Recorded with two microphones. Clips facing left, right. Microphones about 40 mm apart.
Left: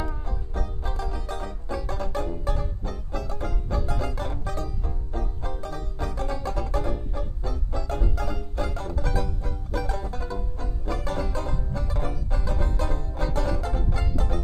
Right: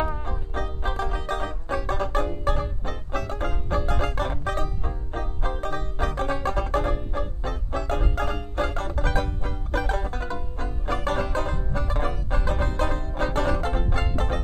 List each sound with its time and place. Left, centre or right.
0.0 s music: right